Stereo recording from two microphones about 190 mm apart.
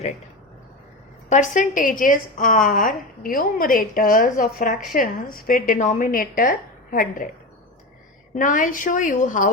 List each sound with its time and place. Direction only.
1.3 s a woman's voice: 40° left (ahead or behind)
8.4 s a woman's voice: 45° left (ahead or behind)